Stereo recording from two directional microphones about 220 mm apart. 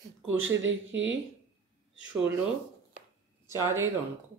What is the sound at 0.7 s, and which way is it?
Speech, 60° right (ahead or behind).